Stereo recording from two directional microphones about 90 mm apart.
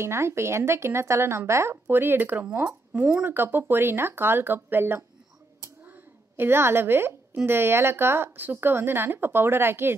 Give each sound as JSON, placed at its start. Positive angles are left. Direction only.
{"t": 0.0, "sound": "speech", "side_deg": -30}
{"t": 5.6, "sound": "a sound", "side_deg": -25}
{"t": 7.4, "sound": "speech", "side_deg": -25}